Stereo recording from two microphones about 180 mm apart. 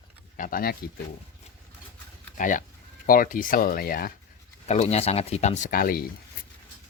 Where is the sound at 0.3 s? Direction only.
50° left (ahead or behind).